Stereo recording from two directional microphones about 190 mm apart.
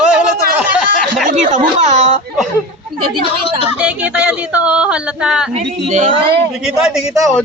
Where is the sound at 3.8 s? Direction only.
5° right (ahead or behind).